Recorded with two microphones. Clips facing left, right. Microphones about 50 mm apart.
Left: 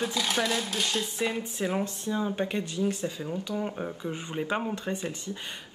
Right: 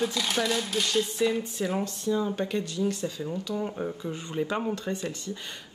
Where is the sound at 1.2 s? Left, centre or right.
Left.